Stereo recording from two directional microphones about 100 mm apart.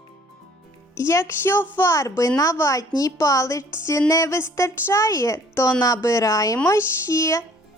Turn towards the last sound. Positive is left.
turn(degrees=30)  # may be behind; listen again after turning